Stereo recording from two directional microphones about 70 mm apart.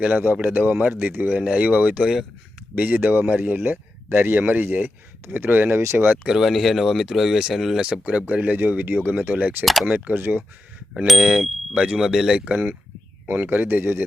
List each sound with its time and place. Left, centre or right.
0.4 s speech: right
2.0 s a sound: centre
2.7 s speech: right
5.8 s speech: right
6.2 s speech: centre
7.8 s speech: centre; by 10.4 s right
10.9 s speech: centre
11.7 s speech: centre
12.5 s speech: right